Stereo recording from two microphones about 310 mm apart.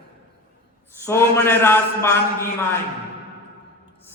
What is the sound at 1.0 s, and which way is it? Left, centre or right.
A man's voice, centre.